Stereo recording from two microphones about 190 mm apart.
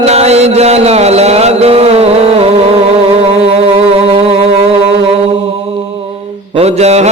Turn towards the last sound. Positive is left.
turn(degrees=-35)  # may be behind; listen again after turning